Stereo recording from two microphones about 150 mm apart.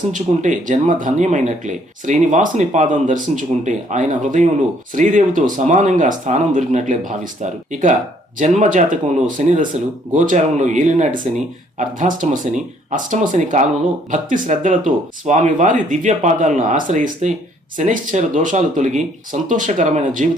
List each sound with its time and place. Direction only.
0.1 s speech: 55° right (ahead or behind)